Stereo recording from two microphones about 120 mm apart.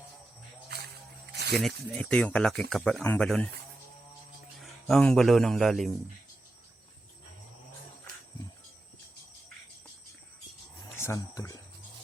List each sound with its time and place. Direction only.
1.5 s speech: 5° left (ahead or behind)
3.0 s speech: 15° left (ahead or behind)
3.2 s speech: 5° left (ahead or behind)
4.6 s a man's voice: 5° left (ahead or behind)
10.9 s a sound: 20° left (ahead or behind)
11.2 s speech: 30° left (ahead or behind)